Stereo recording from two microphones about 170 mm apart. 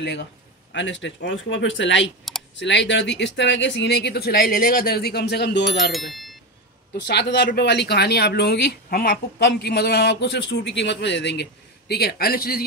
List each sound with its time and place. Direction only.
0.0 s speech: 85° left
5.8 s speech: centre (ahead or behind)
6.9 s speech: 80° left
11.9 s a man's voice: 70° left (ahead or behind)